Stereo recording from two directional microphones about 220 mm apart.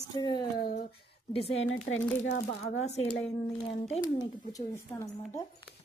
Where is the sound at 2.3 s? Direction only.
35° left (ahead or behind).